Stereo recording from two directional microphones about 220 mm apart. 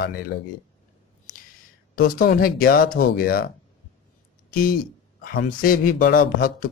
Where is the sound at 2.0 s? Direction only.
40° left (ahead or behind).